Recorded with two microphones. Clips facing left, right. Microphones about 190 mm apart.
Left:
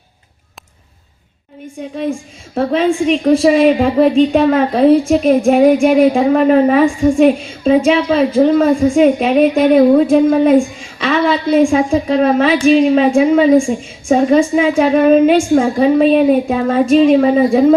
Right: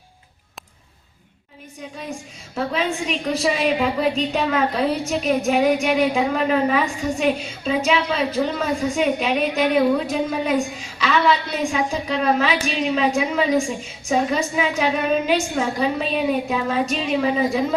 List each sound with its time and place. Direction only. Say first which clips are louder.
2.6 s a woman's voice: left 10 dB; 50° left (ahead or behind)